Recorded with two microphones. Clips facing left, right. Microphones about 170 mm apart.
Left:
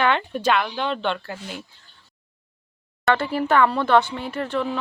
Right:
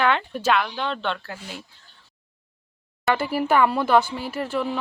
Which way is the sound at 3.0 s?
10° right (ahead or behind).